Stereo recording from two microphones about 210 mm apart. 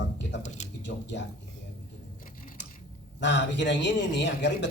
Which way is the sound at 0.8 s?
60° left (ahead or behind).